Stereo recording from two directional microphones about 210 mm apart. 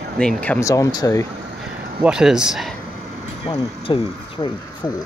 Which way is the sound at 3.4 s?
25° left (ahead or behind).